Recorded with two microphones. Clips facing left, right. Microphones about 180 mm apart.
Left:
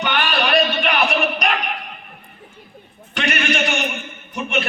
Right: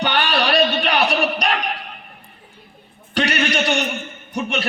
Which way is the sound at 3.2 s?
35° right (ahead or behind).